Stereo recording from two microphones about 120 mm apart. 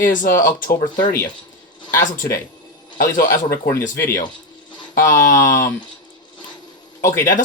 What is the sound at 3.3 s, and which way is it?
Speech, 25° left (ahead or behind).